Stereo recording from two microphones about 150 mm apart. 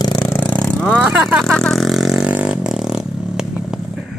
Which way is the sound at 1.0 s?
5° right (ahead or behind).